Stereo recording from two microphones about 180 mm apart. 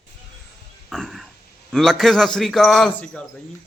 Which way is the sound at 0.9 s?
Centre (ahead or behind).